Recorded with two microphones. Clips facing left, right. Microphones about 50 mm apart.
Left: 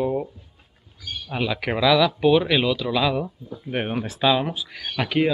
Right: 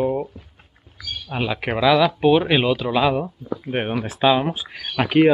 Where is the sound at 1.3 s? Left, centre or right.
Centre; by 3.0 s right.